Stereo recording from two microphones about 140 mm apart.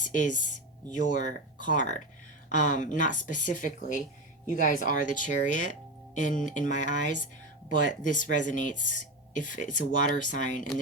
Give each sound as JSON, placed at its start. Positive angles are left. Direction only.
{"t": 0.0, "sound": "speech", "side_deg": 65}